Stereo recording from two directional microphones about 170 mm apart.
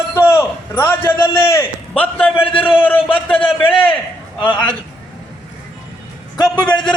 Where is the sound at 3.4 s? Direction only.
30° left (ahead or behind).